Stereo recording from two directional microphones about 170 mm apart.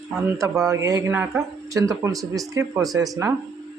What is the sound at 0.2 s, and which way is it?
A man's voice, 15° right (ahead or behind).